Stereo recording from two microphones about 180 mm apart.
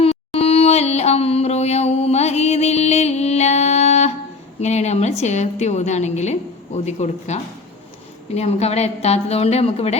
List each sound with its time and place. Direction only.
0.0 s music: 35° left (ahead or behind)
4.6 s a woman's voice: 40° left (ahead or behind)
8.4 s a woman's voice: 35° left (ahead or behind)